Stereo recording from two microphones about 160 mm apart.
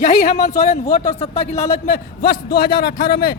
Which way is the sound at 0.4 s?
40° left (ahead or behind).